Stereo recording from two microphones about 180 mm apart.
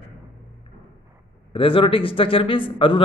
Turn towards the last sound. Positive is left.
turn(degrees=30)  # may be behind; listen again after turning